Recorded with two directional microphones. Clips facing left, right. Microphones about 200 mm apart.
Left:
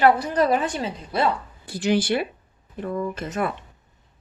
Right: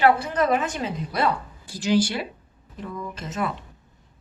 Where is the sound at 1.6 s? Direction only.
60° left (ahead or behind).